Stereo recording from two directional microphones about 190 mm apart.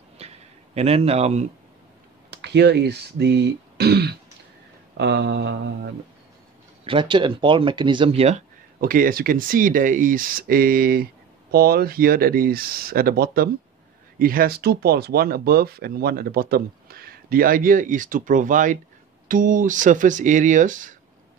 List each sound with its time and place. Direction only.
0.2 s a sound: 35° right (ahead or behind)
0.7 s speech: 30° right (ahead or behind)
2.3 s speech: 65° right (ahead or behind)
4.9 s a sound: 65° right (ahead or behind)
6.8 s speech: 25° right (ahead or behind)
8.8 s speech: 50° right (ahead or behind)